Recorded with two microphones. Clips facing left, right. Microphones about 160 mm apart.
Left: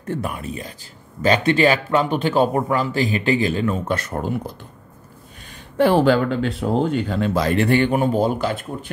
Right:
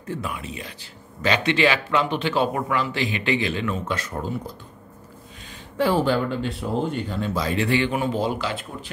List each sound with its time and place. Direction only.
0.0 s a man's voice: 50° left (ahead or behind)
3.9 s speech: 60° left (ahead or behind)
5.8 s speech: 70° left (ahead or behind); by 8.9 s 50° left (ahead or behind)